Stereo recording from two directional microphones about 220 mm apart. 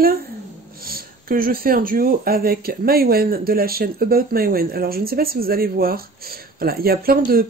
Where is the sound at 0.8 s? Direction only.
40° right (ahead or behind).